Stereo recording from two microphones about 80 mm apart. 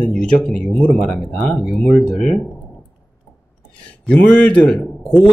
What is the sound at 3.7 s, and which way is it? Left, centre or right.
A man's voice, centre.